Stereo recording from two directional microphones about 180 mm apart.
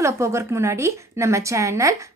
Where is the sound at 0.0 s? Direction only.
15° right (ahead or behind).